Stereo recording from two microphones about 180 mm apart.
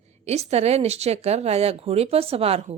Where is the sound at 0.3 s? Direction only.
35° right (ahead or behind).